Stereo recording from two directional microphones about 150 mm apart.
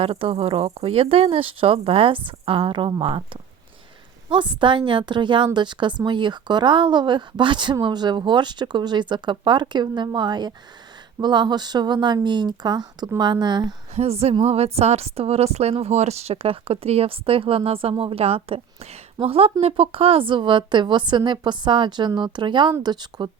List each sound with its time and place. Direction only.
0.0 s a woman's voice: 40° right (ahead or behind)
4.3 s a woman's voice: 35° right (ahead or behind)
13.9 s a woman's voice: 45° right (ahead or behind); by 23.3 s 30° right (ahead or behind)